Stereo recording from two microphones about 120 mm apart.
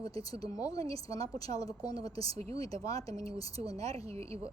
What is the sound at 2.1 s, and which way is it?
Speech, 55° right (ahead or behind).